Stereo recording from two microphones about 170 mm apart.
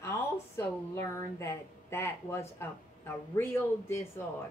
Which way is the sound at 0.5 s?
15° left (ahead or behind).